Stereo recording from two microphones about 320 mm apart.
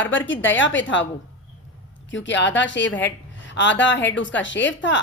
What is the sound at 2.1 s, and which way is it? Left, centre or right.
A woman's voice, left.